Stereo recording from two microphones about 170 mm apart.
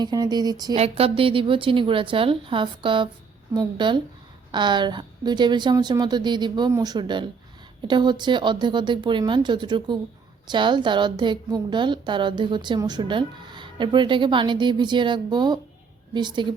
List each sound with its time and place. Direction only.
0.0 s a woman's voice: 25° right (ahead or behind)
0.8 s a woman's voice: 35° right (ahead or behind)